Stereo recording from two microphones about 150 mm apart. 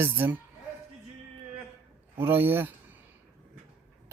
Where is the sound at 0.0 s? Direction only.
10° right (ahead or behind).